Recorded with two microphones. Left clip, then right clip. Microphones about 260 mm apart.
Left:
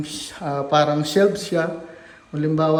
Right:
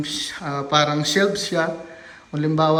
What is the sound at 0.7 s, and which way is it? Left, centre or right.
A man's voice, centre.